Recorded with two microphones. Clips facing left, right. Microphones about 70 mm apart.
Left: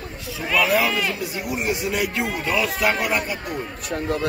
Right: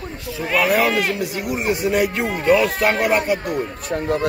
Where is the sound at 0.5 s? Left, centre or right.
Right.